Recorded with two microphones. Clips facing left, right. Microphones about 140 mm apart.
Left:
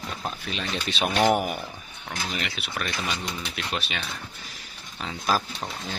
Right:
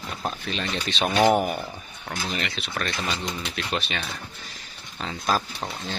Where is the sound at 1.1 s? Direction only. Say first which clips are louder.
Right 2 dB; 10° right (ahead or behind).